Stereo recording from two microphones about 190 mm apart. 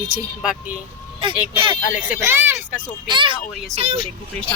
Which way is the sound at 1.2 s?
30° right (ahead or behind).